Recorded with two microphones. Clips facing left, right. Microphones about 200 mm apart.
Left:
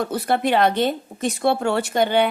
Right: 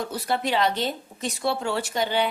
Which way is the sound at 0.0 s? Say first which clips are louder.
Left 6 dB; 55° left (ahead or behind).